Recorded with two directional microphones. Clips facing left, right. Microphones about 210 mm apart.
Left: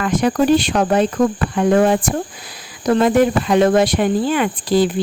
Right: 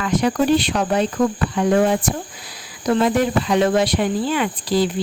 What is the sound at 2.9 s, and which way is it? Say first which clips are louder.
Speech: left 4 dB; 50° left (ahead or behind).